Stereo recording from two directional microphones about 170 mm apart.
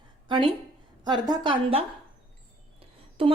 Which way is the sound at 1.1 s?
25° right (ahead or behind).